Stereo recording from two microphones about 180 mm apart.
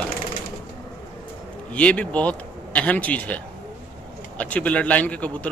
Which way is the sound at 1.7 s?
5° left (ahead or behind).